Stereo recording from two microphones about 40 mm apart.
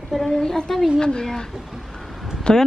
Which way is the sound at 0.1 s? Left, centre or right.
Centre.